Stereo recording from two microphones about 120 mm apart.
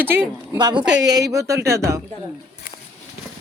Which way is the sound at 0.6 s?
35° right (ahead or behind).